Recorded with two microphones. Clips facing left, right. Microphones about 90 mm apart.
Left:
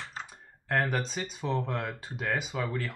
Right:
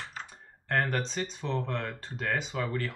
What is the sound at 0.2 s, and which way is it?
Speech, 5° left (ahead or behind).